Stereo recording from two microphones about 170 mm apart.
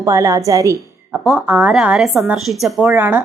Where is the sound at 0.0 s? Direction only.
20° right (ahead or behind).